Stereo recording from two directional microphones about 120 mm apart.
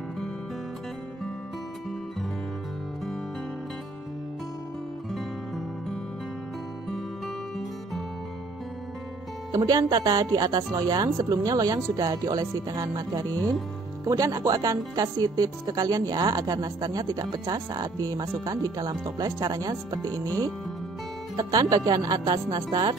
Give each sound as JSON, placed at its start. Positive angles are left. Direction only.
{"t": 9.5, "sound": "a woman's voice", "side_deg": -30}